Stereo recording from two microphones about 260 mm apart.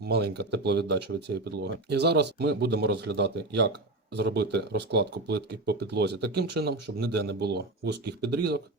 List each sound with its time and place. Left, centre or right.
0.0 s speech: right